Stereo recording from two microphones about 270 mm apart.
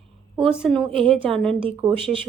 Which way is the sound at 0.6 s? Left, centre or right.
Centre.